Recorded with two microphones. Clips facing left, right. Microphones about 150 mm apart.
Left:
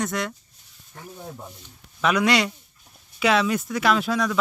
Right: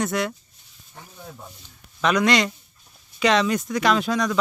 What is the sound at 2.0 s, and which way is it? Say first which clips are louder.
Speech: right 1 dB; 10° left (ahead or behind).